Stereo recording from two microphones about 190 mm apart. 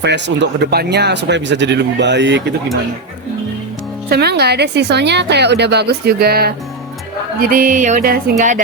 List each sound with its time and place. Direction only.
0.0 s speech: 65° right (ahead or behind)
4.1 s speech: 60° right (ahead or behind)
7.5 s music: 45° right (ahead or behind)